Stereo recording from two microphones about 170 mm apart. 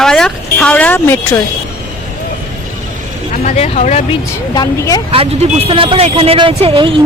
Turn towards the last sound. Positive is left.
turn(degrees=-30)  # may be behind; listen again after turning